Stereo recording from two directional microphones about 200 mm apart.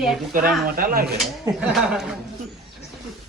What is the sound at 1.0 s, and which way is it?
A woman's voice, centre (ahead or behind).